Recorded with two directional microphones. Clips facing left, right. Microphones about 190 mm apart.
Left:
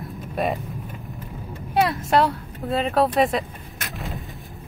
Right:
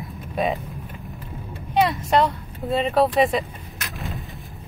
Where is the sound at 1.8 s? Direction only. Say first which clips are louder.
Even; centre (ahead or behind).